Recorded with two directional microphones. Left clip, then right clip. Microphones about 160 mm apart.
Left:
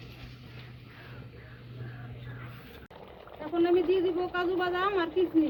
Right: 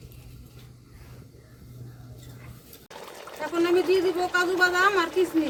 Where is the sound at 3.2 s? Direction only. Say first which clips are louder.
Right 3 dB; 60° right (ahead or behind).